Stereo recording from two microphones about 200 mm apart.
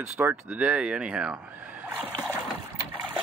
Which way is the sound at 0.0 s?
10° right (ahead or behind).